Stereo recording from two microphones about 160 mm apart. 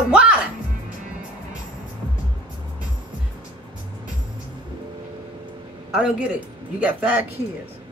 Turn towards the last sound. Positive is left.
turn(degrees=-10)  # may be behind; listen again after turning